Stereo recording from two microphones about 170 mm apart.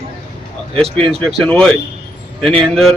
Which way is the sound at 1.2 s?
5° left (ahead or behind).